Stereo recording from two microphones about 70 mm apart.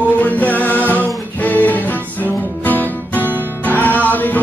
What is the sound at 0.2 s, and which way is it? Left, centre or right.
Music, left.